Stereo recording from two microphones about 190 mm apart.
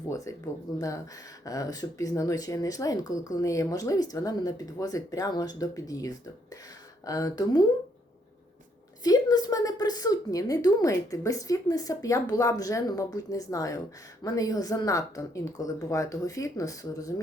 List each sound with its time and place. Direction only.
0.1 s a woman's voice: 15° left (ahead or behind)
9.0 s a woman's voice: 20° left (ahead or behind)